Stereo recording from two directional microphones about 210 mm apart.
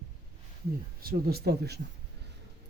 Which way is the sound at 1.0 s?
45° right (ahead or behind).